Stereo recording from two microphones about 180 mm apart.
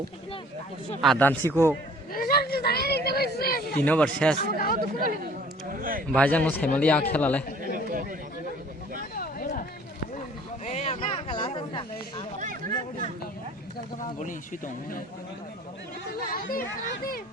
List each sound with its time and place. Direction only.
1.0 s speech: 5° left (ahead or behind)
2.1 s speech: 55° left (ahead or behind)
3.8 s speech: 10° left (ahead or behind)
4.4 s speech: 55° left (ahead or behind)
4.8 s speech: 50° right (ahead or behind)
6.1 s speech: 5° left (ahead or behind)
9.1 s a sound: 55° left (ahead or behind)
10.7 s a sound: 40° left (ahead or behind)
12.4 s chatter: 50° right (ahead or behind)
13.7 s speech: 45° left (ahead or behind)
16.3 s speech: 50° left (ahead or behind)